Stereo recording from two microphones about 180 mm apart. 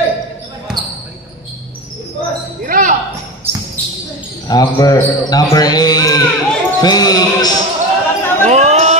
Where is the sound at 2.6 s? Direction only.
45° right (ahead or behind).